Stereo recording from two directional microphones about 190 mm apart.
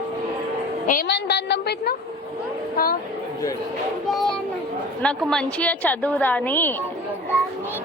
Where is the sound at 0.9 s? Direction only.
55° left (ahead or behind).